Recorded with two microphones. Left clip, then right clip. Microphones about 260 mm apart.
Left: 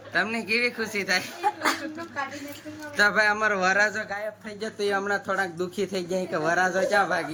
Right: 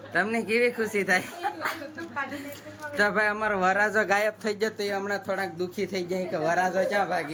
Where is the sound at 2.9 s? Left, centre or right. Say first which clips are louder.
Left 3 dB; centre.